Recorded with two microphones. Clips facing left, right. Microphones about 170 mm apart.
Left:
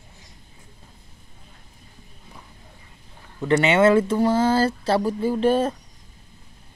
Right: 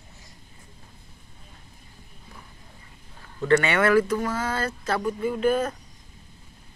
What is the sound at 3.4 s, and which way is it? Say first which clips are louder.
Speech: left 3 dB; 20° left (ahead or behind).